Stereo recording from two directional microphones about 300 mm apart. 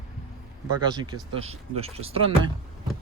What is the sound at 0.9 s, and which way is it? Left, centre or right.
Speech, centre.